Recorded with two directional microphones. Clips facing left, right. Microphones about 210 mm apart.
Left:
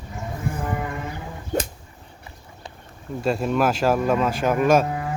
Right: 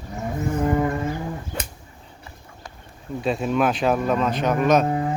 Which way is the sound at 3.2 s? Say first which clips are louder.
Even; centre (ahead or behind).